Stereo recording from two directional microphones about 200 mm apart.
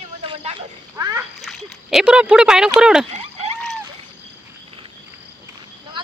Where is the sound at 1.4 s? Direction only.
Centre (ahead or behind).